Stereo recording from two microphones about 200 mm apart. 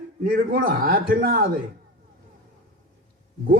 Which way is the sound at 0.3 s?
50° right (ahead or behind).